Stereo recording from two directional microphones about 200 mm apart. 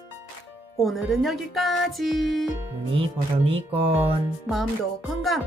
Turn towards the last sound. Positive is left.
turn(degrees=0)  # may be behind; listen again after turning